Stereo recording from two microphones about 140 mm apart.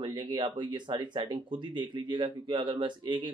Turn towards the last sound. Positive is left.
turn(degrees=-35)  # may be behind; listen again after turning